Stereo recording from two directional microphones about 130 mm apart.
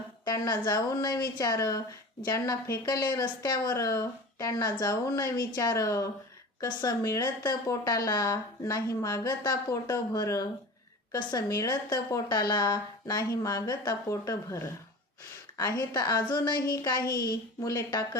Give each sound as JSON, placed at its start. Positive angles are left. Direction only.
{"t": 0.3, "sound": "speech", "side_deg": 30}